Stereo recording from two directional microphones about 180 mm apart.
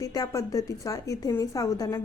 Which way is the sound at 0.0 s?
20° left (ahead or behind).